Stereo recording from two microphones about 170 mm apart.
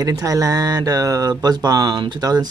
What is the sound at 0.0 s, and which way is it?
Speech, 20° right (ahead or behind).